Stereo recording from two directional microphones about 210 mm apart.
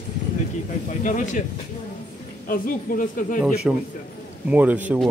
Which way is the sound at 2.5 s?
40° left (ahead or behind).